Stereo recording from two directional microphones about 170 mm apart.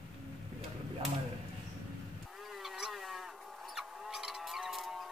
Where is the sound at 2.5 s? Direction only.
Centre (ahead or behind).